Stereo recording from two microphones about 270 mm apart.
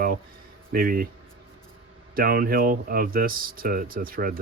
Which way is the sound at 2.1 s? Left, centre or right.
Right.